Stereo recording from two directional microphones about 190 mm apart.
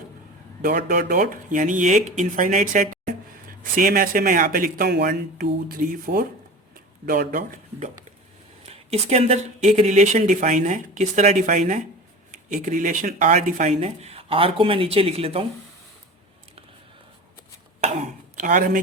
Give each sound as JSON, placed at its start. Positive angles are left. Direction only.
{"t": 0.6, "sound": "speech", "side_deg": -55}
{"t": 8.6, "sound": "speech", "side_deg": -35}
{"t": 18.3, "sound": "speech", "side_deg": -45}